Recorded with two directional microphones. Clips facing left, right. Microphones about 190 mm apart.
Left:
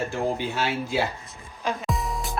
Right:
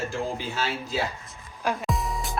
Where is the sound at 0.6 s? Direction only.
55° left (ahead or behind).